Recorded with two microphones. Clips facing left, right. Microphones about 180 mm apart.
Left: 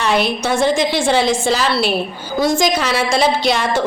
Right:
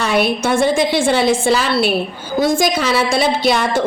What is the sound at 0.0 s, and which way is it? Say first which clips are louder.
A woman's voice: right 1 dB; 55° right (ahead or behind).